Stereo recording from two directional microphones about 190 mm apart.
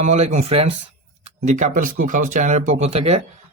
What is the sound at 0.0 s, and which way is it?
Speech, 35° right (ahead or behind).